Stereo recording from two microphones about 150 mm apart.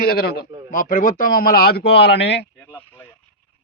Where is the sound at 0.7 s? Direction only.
65° left (ahead or behind); by 2.5 s 90° left.